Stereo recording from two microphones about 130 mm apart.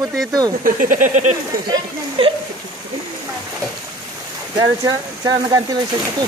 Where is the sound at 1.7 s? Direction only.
45° right (ahead or behind).